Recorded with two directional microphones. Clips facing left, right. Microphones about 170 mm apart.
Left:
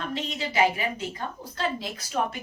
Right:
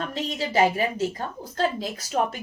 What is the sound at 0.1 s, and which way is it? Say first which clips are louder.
A woman's voice: right 4 dB; 40° right (ahead or behind).